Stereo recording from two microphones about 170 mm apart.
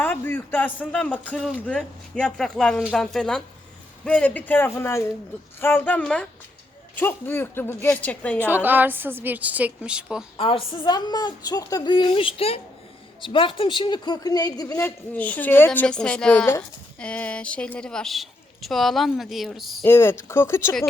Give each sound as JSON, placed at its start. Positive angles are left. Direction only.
{"t": 0.0, "sound": "speech", "side_deg": 15}
{"t": 8.4, "sound": "a woman's voice", "side_deg": -10}
{"t": 10.3, "sound": "a woman's voice", "side_deg": 30}
{"t": 19.8, "sound": "speech", "side_deg": 15}